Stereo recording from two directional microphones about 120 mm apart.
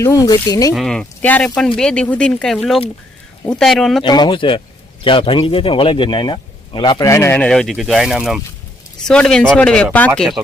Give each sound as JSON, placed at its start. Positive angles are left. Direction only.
{"t": 0.0, "sound": "speech", "side_deg": 30}
{"t": 0.7, "sound": "speech", "side_deg": 0}
{"t": 1.2, "sound": "speech", "side_deg": 15}
{"t": 4.0, "sound": "speech", "side_deg": 40}
{"t": 7.0, "sound": "speech", "side_deg": 25}
{"t": 7.3, "sound": "speech", "side_deg": 5}
{"t": 10.2, "sound": "speech", "side_deg": 0}